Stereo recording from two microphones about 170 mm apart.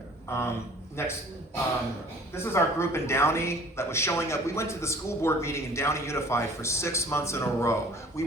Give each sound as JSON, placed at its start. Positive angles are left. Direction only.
{"t": 0.3, "sound": "speech", "side_deg": 15}
{"t": 2.3, "sound": "speech", "side_deg": 15}